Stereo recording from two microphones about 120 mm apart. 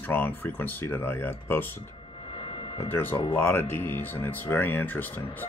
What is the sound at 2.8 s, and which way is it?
Speech, 20° left (ahead or behind).